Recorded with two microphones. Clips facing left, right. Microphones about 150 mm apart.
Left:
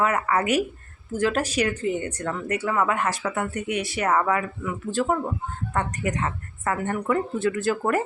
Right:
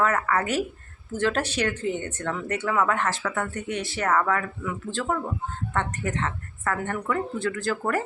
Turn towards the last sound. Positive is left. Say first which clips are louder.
# left 3 dB
turn(degrees=20)  # may be behind; listen again after turning